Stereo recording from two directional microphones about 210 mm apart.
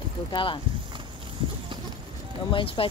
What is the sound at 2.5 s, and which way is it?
Speech, 25° left (ahead or behind).